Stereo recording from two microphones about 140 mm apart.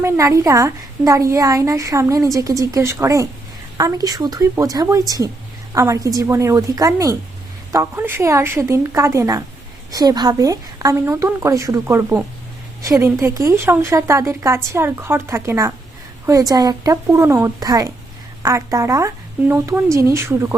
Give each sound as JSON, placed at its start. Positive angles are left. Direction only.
{"t": 0.0, "sound": "a woman's voice", "side_deg": -20}